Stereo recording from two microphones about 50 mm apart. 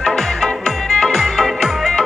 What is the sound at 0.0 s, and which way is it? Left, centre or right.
Music, centre.